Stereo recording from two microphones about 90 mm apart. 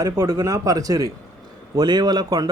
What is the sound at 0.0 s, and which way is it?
Speech, 45° right (ahead or behind).